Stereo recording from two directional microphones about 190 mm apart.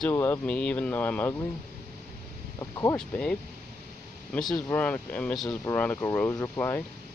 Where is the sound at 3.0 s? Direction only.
5° left (ahead or behind).